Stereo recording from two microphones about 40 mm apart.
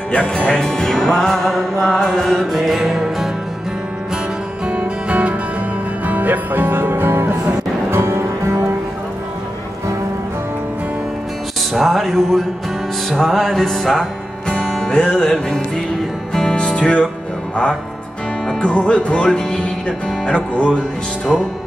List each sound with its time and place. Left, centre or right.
0.3 s music: left; by 3.3 s centre
4.6 s music: right
6.0 s music: right
7.9 s music: right
11.7 s music: centre
15.0 s music: centre
16.3 s music: centre
18.6 s music: left